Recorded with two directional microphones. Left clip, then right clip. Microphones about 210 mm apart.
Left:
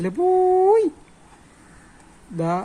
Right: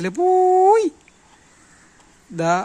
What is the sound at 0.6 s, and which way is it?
Speech, 35° right (ahead or behind).